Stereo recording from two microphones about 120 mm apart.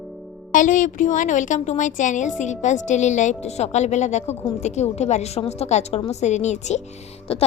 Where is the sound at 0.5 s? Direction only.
90° left; by 6.8 s 70° left (ahead or behind).